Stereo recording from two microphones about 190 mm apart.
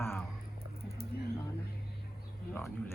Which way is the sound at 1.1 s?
55° left (ahead or behind).